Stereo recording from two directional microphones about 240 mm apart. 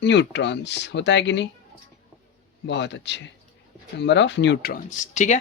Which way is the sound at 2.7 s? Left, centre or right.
Left.